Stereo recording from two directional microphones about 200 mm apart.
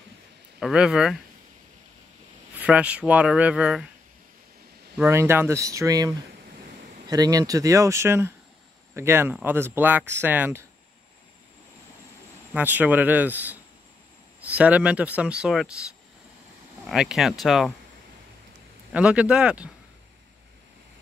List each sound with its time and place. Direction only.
0.6 s speech: 5° right (ahead or behind)
2.5 s speech: 5° right (ahead or behind)
4.9 s speech: 10° right (ahead or behind)
12.5 s speech: 10° right (ahead or behind)
18.9 s speech: 5° right (ahead or behind)